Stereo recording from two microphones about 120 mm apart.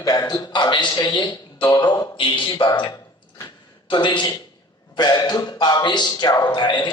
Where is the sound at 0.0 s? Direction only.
30° left (ahead or behind).